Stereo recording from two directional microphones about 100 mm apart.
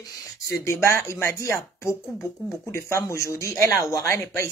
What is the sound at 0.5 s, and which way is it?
Speech, 25° left (ahead or behind).